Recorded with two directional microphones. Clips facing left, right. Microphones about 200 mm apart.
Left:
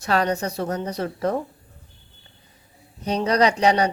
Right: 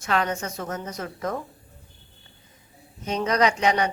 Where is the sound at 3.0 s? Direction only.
35° left (ahead or behind).